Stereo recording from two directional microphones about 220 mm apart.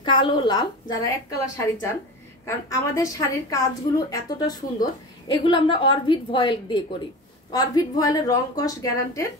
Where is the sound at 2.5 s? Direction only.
15° left (ahead or behind).